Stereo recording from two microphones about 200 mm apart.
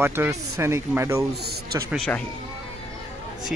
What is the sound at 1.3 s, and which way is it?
Speech, 55° right (ahead or behind).